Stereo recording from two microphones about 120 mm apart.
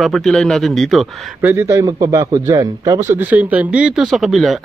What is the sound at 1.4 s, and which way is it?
A man's voice, 20° right (ahead or behind).